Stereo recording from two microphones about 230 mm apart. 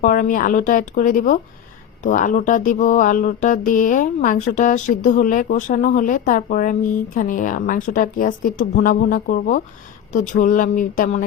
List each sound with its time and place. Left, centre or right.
0.0 s speech: left